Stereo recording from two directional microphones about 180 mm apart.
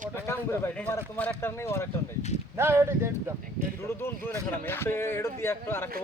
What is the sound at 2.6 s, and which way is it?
Speech, 15° right (ahead or behind).